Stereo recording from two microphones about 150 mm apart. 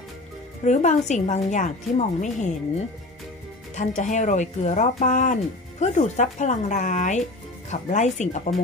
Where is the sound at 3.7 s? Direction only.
55° left (ahead or behind).